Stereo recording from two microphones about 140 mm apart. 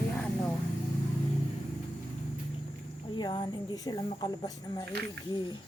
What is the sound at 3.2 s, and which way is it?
Speech, 30° left (ahead or behind).